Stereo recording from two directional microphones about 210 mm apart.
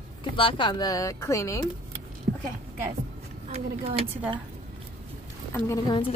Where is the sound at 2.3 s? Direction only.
40° right (ahead or behind).